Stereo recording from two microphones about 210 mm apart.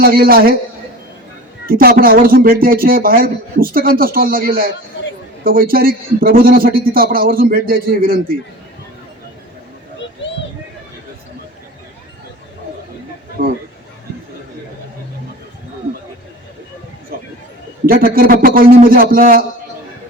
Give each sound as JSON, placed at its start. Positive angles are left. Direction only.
{"t": 0.0, "sound": "speech", "side_deg": -45}
{"t": 1.6, "sound": "speech", "side_deg": -45}
{"t": 13.4, "sound": "speech", "side_deg": -40}
{"t": 17.8, "sound": "speech", "side_deg": -45}